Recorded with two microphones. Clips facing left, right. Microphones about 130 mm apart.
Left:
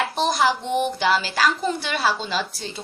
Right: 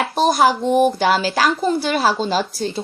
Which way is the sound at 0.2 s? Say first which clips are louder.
Right 7 dB; 50° right (ahead or behind).